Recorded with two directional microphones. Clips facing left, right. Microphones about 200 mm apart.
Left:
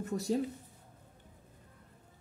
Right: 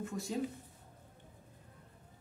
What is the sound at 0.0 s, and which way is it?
Speech, 40° left (ahead or behind).